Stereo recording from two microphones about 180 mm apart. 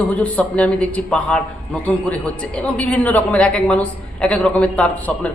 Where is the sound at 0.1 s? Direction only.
5° left (ahead or behind).